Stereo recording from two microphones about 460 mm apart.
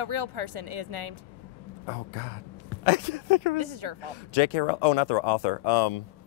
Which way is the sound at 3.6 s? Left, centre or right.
Right.